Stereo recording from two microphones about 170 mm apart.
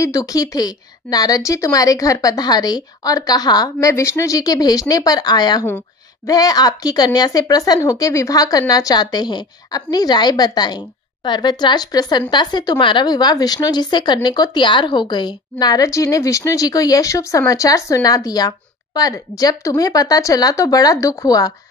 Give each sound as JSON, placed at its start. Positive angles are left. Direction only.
{"t": 0.0, "sound": "speech", "side_deg": 20}